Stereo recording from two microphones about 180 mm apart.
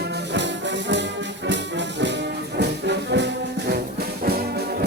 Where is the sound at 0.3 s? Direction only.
80° right.